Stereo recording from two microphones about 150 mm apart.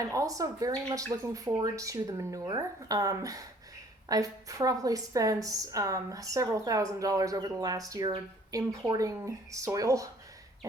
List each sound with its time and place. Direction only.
0.0 s a woman's voice: 20° right (ahead or behind)